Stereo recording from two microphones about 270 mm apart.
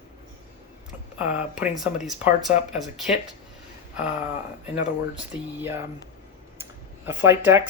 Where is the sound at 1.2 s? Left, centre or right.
Centre.